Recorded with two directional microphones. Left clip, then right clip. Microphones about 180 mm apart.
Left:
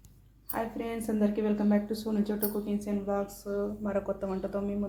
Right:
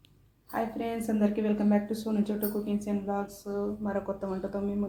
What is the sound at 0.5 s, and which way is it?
A woman's voice, 5° left (ahead or behind).